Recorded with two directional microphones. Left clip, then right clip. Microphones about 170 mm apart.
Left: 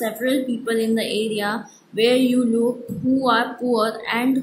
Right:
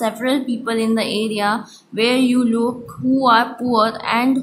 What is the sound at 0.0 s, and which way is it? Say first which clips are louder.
A woman's voice: right 2 dB; 20° right (ahead or behind).